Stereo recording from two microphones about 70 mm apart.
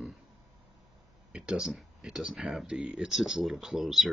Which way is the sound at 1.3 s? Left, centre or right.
Centre.